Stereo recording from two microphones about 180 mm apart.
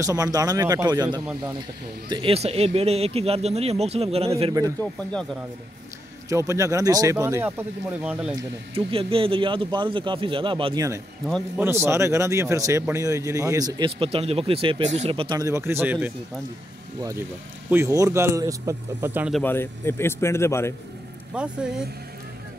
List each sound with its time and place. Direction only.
0.0 s speech: 20° right (ahead or behind); by 4.3 s 35° right (ahead or behind)
6.2 s a man's voice: 15° right (ahead or behind)
8.7 s speech: 30° right (ahead or behind)
11.2 s a man's voice: 5° left (ahead or behind)
11.6 s a man's voice: 15° right (ahead or behind)
17.6 s a man's voice: 15° right (ahead or behind)
19.3 s a man's voice: 10° left (ahead or behind)
21.3 s a man's voice: 5° right (ahead or behind)